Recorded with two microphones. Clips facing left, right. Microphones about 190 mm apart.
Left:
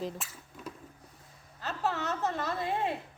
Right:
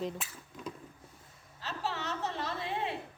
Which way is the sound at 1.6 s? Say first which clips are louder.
Left 4 dB; 50° left (ahead or behind).